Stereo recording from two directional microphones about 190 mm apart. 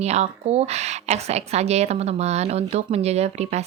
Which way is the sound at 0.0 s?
35° right (ahead or behind).